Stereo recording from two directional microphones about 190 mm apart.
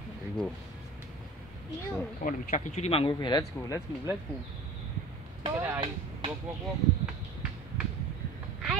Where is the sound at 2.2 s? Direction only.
35° left (ahead or behind); by 3.8 s 20° left (ahead or behind).